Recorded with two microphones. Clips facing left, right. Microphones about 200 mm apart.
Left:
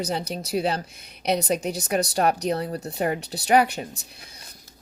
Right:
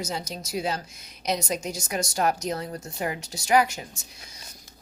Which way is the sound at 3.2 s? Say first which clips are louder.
Left 4 dB; 60° left (ahead or behind).